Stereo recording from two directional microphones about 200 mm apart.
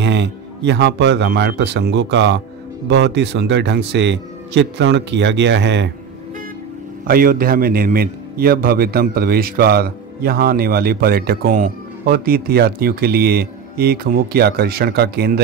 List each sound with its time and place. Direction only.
0.0 s speech: 60° right (ahead or behind)
7.1 s a man's voice: 45° right (ahead or behind)